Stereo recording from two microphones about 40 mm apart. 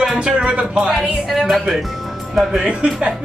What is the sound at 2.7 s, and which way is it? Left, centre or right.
Speech, right.